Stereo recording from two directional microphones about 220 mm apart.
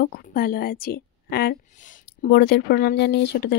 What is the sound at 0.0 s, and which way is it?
A woman's voice, 45° left (ahead or behind).